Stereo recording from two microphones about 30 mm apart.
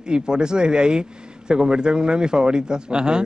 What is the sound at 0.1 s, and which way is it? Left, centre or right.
Speech, right.